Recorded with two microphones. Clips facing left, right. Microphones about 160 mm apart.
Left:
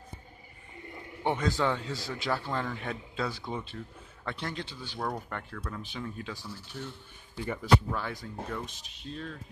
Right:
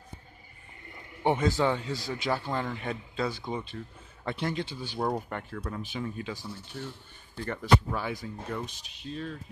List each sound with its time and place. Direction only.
1.2 s speech: 10° right (ahead or behind)
4.2 s speech: 15° right (ahead or behind)
5.8 s speech: 5° right (ahead or behind)
7.9 s speech: 10° right (ahead or behind)